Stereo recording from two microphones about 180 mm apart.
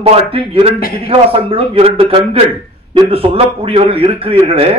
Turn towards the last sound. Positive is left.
turn(degrees=-30)  # may be behind; listen again after turning